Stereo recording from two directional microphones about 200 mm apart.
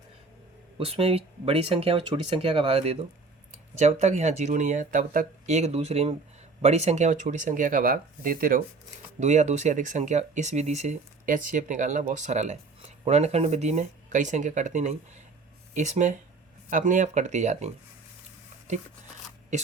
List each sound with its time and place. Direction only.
0.8 s speech: 30° right (ahead or behind)